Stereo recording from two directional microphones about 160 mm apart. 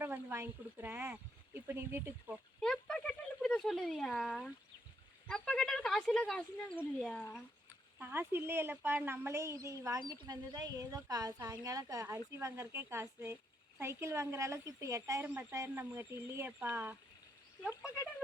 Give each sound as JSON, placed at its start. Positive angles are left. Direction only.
{"t": 0.0, "sound": "speech", "side_deg": -15}
{"t": 2.6, "sound": "a sound", "side_deg": 5}
{"t": 5.3, "sound": "speech", "side_deg": 5}
{"t": 7.9, "sound": "speech", "side_deg": -15}